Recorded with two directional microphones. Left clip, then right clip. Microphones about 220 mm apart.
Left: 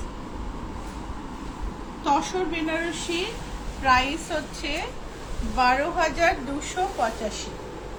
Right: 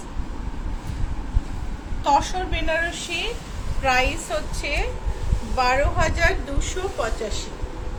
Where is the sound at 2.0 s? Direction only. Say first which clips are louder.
Right 3 dB; 35° right (ahead or behind).